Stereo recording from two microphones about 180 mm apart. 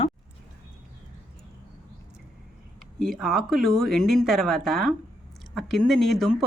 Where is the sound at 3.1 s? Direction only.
Centre (ahead or behind).